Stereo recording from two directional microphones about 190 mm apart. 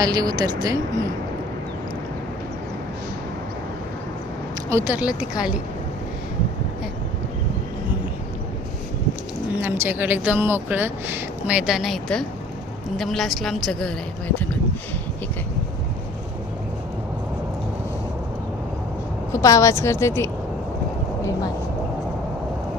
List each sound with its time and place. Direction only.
0.0 s speech: 20° right (ahead or behind)
4.7 s speech: 10° right (ahead or behind)
9.6 s a woman's voice: 10° right (ahead or behind); by 14.4 s 5° left (ahead or behind)
19.3 s a woman's voice: 15° left (ahead or behind)